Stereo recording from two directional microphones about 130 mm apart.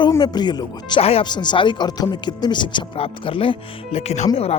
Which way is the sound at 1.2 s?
35° left (ahead or behind).